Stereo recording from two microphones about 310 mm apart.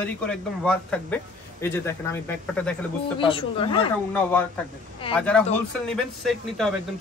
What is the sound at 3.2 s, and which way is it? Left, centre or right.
Speech, centre.